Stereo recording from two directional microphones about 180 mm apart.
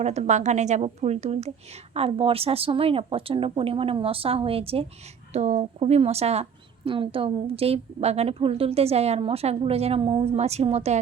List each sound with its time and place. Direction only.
0.0 s a woman's voice: 40° right (ahead or behind)